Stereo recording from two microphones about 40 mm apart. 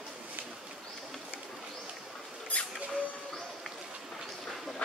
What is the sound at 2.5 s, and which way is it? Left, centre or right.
Rodents, left.